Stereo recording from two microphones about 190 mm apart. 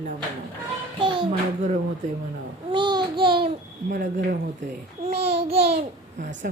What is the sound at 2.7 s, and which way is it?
Babbling, 25° right (ahead or behind).